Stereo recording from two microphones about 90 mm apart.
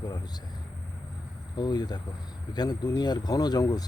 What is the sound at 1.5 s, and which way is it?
Speech, 50° left (ahead or behind).